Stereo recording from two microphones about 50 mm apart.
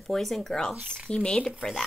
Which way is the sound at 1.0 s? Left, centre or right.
Centre.